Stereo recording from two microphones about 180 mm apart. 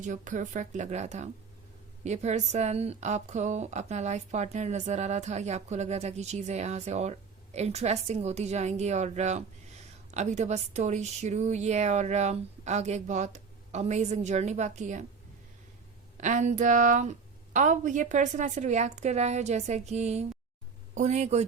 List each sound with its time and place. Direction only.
0.0 s a woman's voice: 45° right (ahead or behind)
16.1 s a woman's voice: 45° right (ahead or behind)